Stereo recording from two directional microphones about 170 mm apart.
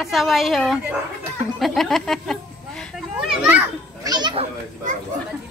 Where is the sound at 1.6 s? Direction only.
Centre (ahead or behind).